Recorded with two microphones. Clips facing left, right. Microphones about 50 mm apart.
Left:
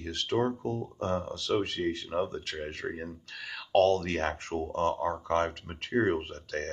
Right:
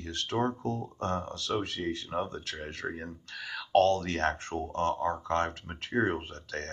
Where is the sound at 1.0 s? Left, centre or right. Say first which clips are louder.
Left 1 dB; left.